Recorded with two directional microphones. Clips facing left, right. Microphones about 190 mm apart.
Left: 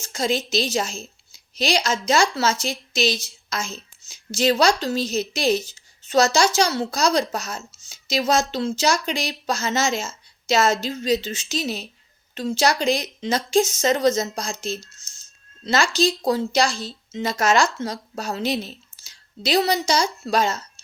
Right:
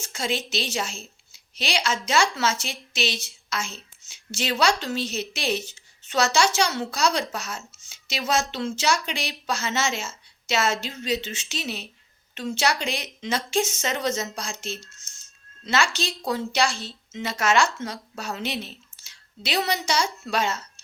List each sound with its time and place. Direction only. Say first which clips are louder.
0.0 s a woman's voice: left 5 dB; 40° left (ahead or behind)